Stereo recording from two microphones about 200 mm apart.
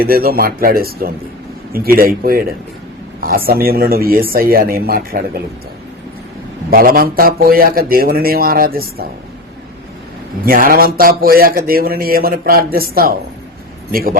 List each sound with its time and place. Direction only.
0.0 s speech: 50° right (ahead or behind)
6.7 s speech: 45° right (ahead or behind)
10.4 s speech: 45° right (ahead or behind)